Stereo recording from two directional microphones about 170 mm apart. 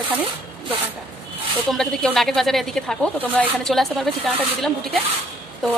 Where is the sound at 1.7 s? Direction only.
Centre (ahead or behind).